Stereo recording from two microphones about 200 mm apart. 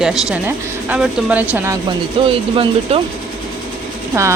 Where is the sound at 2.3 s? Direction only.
25° right (ahead or behind).